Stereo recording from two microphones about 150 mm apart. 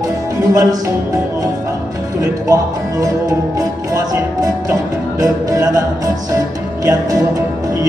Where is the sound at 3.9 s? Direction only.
20° right (ahead or behind).